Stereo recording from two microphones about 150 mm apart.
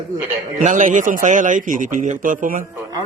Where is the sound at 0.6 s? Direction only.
60° right (ahead or behind).